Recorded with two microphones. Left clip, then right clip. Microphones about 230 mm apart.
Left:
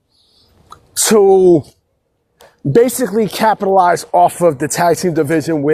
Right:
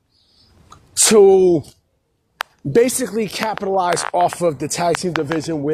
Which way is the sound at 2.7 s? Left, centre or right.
Left.